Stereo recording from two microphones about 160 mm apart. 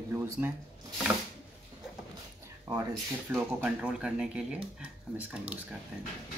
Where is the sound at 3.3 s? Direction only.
10° right (ahead or behind).